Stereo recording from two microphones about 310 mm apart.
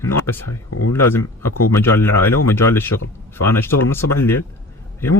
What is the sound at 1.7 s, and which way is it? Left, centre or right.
Speech, centre.